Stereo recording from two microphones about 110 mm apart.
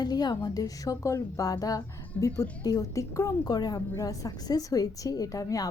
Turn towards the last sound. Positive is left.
turn(degrees=30)  # may be behind; listen again after turning